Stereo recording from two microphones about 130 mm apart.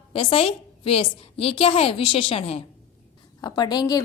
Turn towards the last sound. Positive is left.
turn(degrees=30)  # may be behind; listen again after turning